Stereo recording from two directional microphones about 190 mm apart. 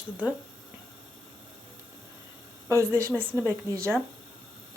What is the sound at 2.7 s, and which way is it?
A woman's voice, 15° right (ahead or behind).